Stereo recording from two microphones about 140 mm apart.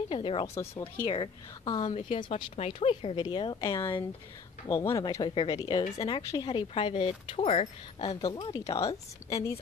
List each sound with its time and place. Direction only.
0.1 s speech: 40° left (ahead or behind)
0.6 s speech: 20° left (ahead or behind)
1.0 s speech: 35° left (ahead or behind)
1.8 s a woman's voice: 55° left (ahead or behind)
2.0 s speech: 35° left (ahead or behind)
3.6 s speech: 20° left (ahead or behind); by 7.6 s 45° left (ahead or behind)
8.0 s speech: 30° left (ahead or behind)